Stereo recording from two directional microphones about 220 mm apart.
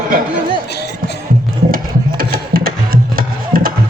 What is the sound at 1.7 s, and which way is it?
Music, 40° right (ahead or behind).